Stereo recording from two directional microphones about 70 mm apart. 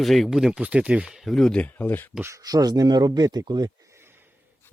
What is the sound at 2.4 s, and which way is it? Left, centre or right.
Speech, right.